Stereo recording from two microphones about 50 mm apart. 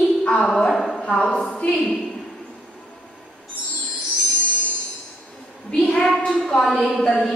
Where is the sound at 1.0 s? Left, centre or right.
Centre.